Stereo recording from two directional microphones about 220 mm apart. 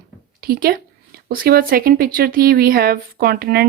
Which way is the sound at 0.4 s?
45° right (ahead or behind).